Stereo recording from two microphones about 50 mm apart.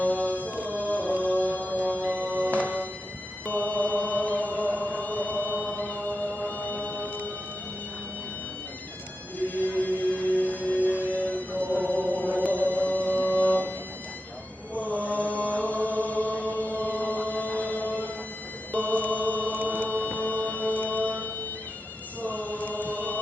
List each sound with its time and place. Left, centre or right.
0.0 s music: left
2.6 s music: right
3.4 s chant: left
5.7 s music: left
9.4 s music: left
11.6 s a sound: right
11.9 s music: left
15.0 s chant: left
19.5 s music: right
19.8 s music: left
22.2 s chant: left